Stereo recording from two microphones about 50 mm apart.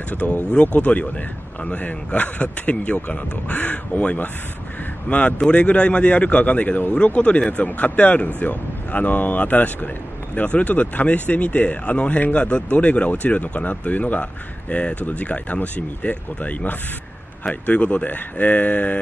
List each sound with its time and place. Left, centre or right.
0.1 s speech: left